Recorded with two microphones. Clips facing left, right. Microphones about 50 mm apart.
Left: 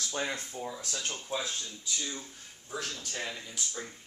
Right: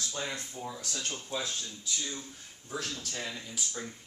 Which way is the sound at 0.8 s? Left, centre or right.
Centre.